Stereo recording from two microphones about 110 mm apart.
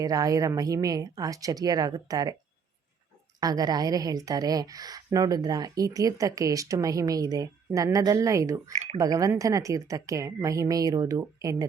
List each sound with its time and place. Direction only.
0.0 s a woman's voice: 35° right (ahead or behind)
3.4 s a woman's voice: 40° right (ahead or behind)